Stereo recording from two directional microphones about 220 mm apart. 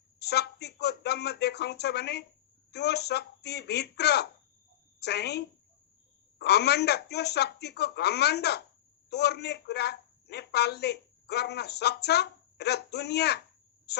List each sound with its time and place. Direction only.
0.2 s a man's voice: 50° left (ahead or behind)